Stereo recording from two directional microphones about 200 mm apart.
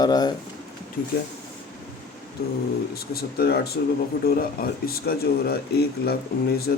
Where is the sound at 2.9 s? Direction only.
50° left (ahead or behind).